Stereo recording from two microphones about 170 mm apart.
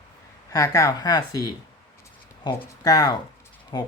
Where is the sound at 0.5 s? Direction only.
20° left (ahead or behind).